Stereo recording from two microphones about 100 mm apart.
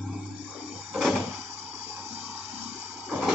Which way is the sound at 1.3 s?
20° right (ahead or behind).